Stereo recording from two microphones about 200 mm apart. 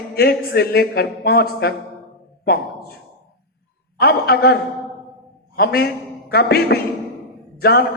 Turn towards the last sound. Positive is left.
turn(degrees=50)  # may be behind; listen again after turning